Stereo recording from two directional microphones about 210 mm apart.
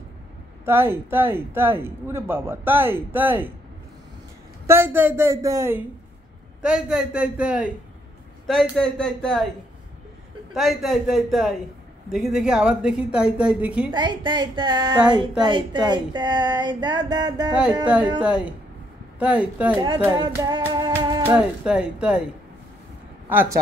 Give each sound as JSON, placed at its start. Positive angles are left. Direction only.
{"t": 0.7, "sound": "a man's voice", "side_deg": -10}
{"t": 4.6, "sound": "a man's voice", "side_deg": -10}
{"t": 10.5, "sound": "speech", "side_deg": 0}
{"t": 13.9, "sound": "speech", "side_deg": -20}
{"t": 17.8, "sound": "speech", "side_deg": -5}
{"t": 20.1, "sound": "music", "side_deg": -20}
{"t": 21.4, "sound": "speech", "side_deg": -5}
{"t": 23.2, "sound": "speech", "side_deg": -10}